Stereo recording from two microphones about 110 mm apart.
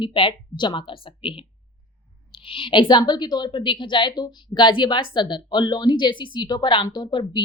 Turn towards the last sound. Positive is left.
turn(degrees=45)  # may be behind; listen again after turning